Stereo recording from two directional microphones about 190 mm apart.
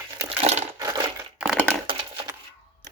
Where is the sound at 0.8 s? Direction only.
20° right (ahead or behind).